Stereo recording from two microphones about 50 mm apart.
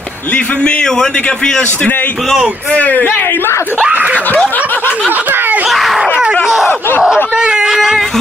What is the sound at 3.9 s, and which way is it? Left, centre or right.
Snicker, right.